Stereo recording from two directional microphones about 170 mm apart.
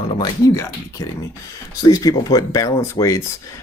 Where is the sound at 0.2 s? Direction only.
20° left (ahead or behind).